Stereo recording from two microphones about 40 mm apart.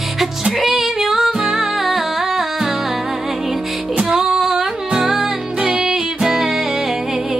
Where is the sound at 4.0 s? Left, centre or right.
Centre.